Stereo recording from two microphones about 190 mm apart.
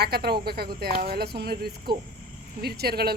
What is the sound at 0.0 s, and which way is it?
A woman's voice, 55° right (ahead or behind).